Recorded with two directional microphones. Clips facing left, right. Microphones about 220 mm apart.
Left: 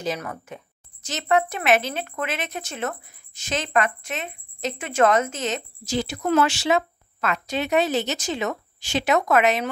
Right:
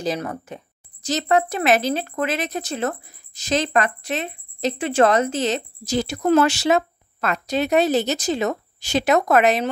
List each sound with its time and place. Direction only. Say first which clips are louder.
0.0 s speech: right 4 dB; 35° right (ahead or behind)